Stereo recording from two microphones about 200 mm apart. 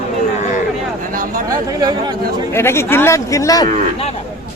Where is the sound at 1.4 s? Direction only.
20° right (ahead or behind).